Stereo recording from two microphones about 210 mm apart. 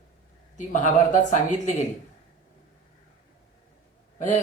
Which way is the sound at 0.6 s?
35° left (ahead or behind).